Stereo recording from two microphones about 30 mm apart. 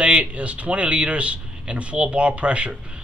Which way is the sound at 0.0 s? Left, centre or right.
Right.